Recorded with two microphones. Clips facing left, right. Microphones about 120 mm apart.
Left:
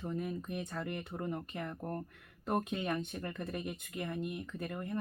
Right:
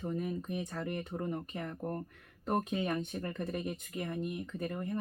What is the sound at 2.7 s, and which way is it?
Speech, 25° right (ahead or behind).